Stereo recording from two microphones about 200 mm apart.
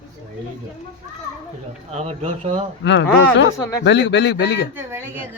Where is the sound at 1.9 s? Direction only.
35° right (ahead or behind).